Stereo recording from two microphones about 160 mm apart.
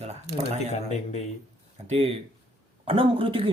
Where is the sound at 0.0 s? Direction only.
45° right (ahead or behind).